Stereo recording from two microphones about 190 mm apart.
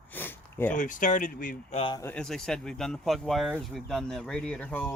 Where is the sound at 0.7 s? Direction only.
45° left (ahead or behind).